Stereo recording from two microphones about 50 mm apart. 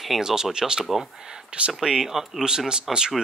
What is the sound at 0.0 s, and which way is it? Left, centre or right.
Speech, centre.